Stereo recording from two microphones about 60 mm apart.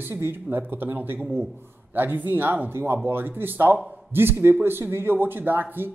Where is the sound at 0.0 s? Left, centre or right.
Right.